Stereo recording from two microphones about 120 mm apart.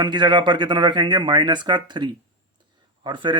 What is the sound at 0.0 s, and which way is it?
Speech, 40° right (ahead or behind).